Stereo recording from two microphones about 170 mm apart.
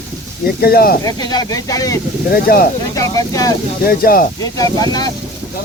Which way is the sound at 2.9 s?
20° left (ahead or behind).